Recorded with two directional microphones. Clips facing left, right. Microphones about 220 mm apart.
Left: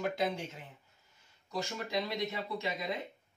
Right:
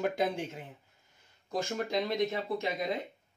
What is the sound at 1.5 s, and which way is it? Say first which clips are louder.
Speech: right 5 dB; 50° right (ahead or behind).